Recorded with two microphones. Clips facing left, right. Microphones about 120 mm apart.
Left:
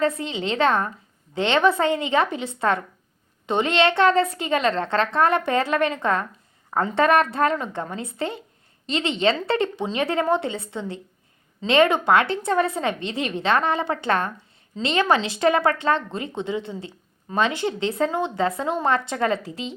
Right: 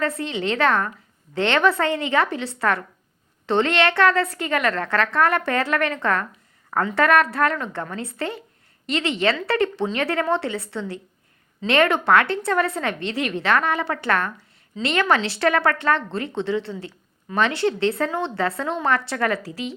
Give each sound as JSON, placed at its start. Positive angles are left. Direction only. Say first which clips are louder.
{"t": 0.0, "sound": "a woman's voice", "louder": "left 1 dB", "side_deg": 20}